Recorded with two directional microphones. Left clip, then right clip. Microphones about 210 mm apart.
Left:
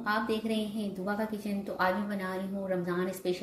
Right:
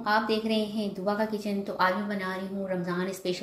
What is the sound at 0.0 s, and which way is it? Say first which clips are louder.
A woman's voice: right 5 dB; 5° right (ahead or behind).